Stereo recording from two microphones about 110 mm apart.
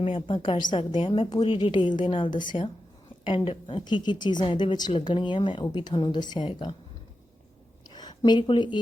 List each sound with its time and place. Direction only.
0.0 s a woman's voice: 50° left (ahead or behind)
7.9 s speech: 40° left (ahead or behind)